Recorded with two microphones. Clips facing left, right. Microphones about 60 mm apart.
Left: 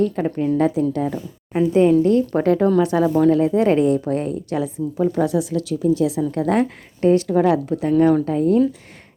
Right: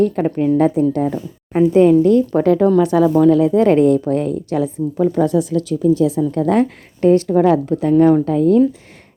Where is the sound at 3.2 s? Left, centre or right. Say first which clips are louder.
Right 3 dB; left.